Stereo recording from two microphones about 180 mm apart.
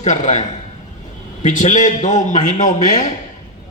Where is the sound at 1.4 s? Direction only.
45° left (ahead or behind).